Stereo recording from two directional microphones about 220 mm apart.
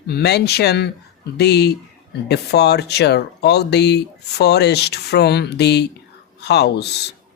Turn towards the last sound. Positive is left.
turn(degrees=50)  # may be behind; listen again after turning